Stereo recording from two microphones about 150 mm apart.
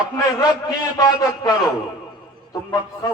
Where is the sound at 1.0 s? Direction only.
25° left (ahead or behind).